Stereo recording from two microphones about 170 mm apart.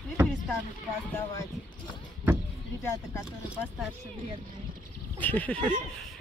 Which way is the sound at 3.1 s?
15° left (ahead or behind).